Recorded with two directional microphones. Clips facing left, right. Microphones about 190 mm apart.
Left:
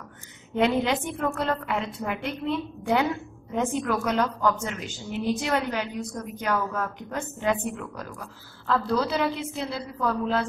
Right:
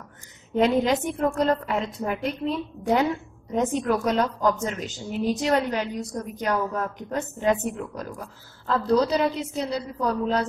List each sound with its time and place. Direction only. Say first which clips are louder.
0.6 s a woman's voice: right 3 dB; 40° right (ahead or behind)